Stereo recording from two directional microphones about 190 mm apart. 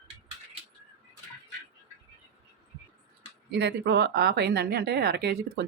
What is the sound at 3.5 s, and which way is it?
A woman's voice, 60° right (ahead or behind).